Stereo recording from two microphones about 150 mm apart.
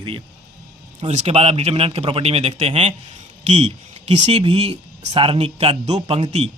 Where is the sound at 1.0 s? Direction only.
50° right (ahead or behind).